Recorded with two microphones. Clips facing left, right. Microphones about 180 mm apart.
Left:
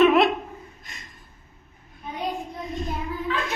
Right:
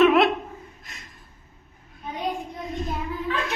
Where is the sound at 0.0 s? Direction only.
Centre (ahead or behind).